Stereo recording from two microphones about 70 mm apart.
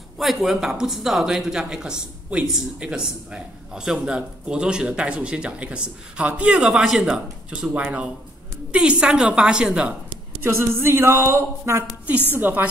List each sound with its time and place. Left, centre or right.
0.2 s speech: centre
6.5 s speech: centre
10.4 s speech: right
12.3 s a woman's voice: right